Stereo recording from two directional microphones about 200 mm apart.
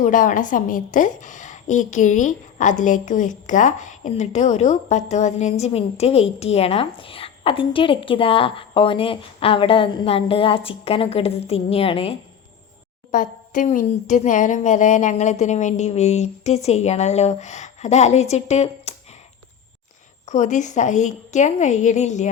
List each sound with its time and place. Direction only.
0.0 s a woman's voice: 40° left (ahead or behind)
13.1 s a woman's voice: 40° left (ahead or behind)
20.2 s a woman's voice: 35° left (ahead or behind)